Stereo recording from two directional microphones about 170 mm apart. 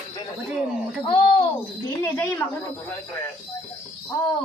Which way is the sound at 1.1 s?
30° left (ahead or behind).